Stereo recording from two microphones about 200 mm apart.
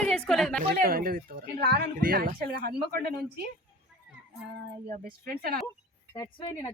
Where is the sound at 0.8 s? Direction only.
45° right (ahead or behind).